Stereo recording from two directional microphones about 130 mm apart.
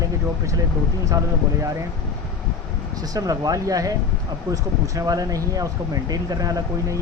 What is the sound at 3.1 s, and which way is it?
Speech, 30° right (ahead or behind).